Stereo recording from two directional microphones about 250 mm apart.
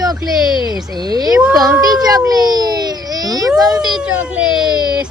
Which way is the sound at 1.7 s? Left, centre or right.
Centre.